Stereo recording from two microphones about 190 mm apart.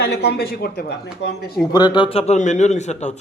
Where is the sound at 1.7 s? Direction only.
25° left (ahead or behind).